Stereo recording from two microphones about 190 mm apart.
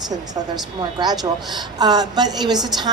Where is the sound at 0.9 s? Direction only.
20° right (ahead or behind).